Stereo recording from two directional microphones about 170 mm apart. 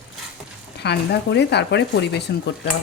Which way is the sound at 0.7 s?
80° left.